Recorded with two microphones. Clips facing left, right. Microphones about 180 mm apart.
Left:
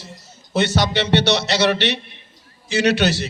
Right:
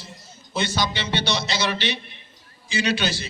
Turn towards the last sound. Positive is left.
turn(degrees=75)  # may be behind; listen again after turning